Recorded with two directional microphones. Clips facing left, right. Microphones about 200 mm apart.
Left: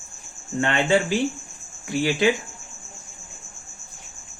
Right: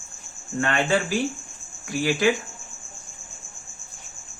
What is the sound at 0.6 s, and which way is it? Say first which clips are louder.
Speech: left 2 dB; 25° left (ahead or behind).